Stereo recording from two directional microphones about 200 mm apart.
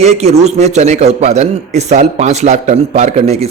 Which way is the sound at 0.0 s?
35° right (ahead or behind).